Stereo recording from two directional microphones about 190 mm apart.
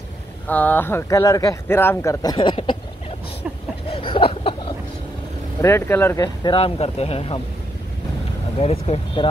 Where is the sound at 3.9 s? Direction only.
30° left (ahead or behind).